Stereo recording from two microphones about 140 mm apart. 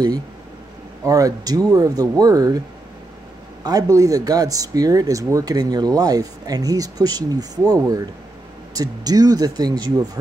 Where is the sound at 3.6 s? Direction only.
25° right (ahead or behind).